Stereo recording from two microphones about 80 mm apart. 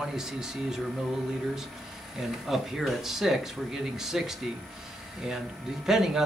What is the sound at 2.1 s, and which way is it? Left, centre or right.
Speech, centre.